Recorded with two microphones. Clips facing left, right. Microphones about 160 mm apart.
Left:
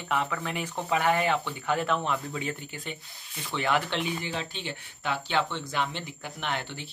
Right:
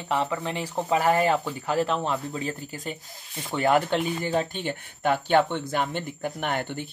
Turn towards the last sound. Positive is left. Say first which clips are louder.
# right 5 dB
turn(degrees=-50)  # may be behind; listen again after turning